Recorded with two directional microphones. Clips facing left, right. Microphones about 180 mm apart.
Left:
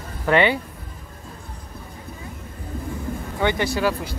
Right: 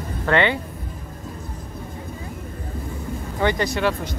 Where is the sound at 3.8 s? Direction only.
10° left (ahead or behind).